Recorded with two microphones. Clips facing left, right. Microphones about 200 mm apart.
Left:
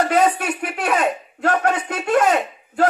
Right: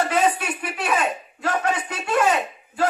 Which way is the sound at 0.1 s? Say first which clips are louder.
Left 4 dB; 60° left (ahead or behind).